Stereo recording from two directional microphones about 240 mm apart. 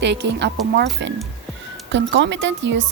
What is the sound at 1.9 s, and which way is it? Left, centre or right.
A woman's voice, right.